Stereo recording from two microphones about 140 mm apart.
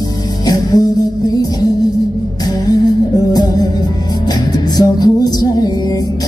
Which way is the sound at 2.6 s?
25° left (ahead or behind).